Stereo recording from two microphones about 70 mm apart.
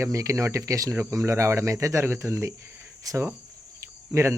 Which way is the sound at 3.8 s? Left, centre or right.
Right.